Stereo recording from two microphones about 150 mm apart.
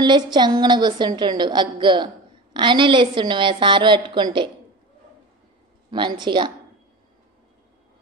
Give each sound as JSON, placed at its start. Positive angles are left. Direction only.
{"t": 0.0, "sound": "a woman's voice", "side_deg": -30}
{"t": 5.9, "sound": "a woman's voice", "side_deg": -30}